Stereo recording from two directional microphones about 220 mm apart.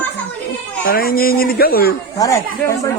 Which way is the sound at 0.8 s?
40° left (ahead or behind).